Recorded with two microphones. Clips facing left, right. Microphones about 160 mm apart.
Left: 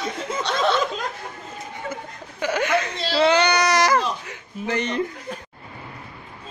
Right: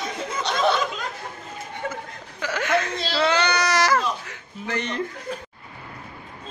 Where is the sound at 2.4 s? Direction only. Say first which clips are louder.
Left 2 dB; 20° left (ahead or behind).